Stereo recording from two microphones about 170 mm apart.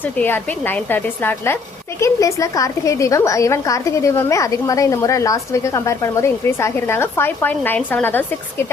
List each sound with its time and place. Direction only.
0.0 s a woman's voice: 10° left (ahead or behind)